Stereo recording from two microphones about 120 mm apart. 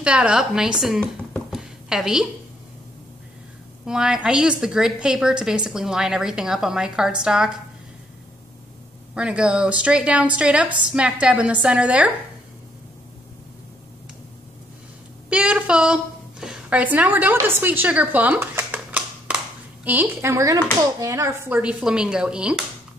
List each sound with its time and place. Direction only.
0.0 s a woman's voice: 10° right (ahead or behind)
1.5 s a sound: 5° right (ahead or behind)
3.8 s a woman's voice: 5° right (ahead or behind)
9.1 s a woman's voice: 10° right (ahead or behind)
15.2 s a woman's voice: 10° right (ahead or behind); by 21.5 s 25° right (ahead or behind)
21.5 s a woman's voice: 10° right (ahead or behind)